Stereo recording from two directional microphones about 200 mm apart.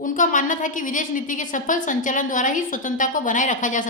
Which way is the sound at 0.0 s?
40° left (ahead or behind).